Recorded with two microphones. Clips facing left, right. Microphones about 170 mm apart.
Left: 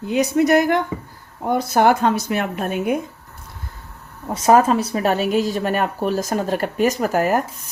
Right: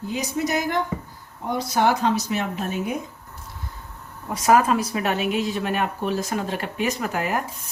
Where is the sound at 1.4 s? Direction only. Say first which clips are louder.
Left 5 dB; 50° left (ahead or behind).